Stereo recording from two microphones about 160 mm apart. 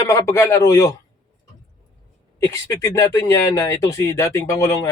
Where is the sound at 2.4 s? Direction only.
20° left (ahead or behind).